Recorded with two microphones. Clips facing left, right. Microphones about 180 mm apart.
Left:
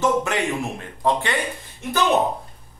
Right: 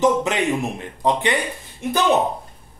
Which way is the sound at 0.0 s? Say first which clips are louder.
Right 3 dB; 20° right (ahead or behind).